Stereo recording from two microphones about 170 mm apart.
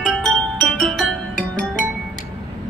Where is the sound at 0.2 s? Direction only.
5° left (ahead or behind).